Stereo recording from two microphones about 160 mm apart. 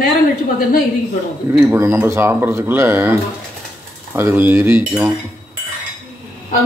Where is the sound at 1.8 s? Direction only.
15° right (ahead or behind).